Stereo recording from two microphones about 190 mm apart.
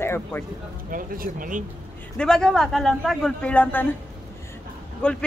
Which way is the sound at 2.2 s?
5° left (ahead or behind).